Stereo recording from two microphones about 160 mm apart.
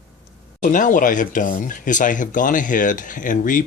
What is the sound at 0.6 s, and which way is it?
Speech, 55° left (ahead or behind).